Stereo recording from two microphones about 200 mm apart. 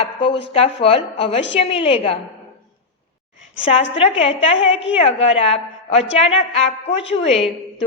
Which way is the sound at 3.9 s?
30° left (ahead or behind).